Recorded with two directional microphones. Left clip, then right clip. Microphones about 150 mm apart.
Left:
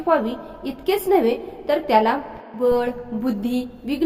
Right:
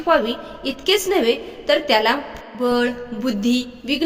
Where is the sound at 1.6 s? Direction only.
15° right (ahead or behind).